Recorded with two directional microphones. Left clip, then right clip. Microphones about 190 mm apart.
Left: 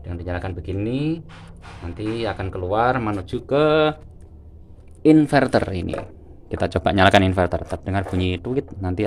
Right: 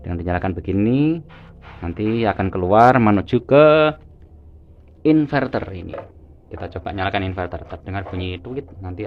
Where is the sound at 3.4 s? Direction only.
20° right (ahead or behind).